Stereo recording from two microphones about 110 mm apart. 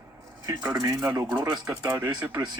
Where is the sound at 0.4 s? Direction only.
30° right (ahead or behind).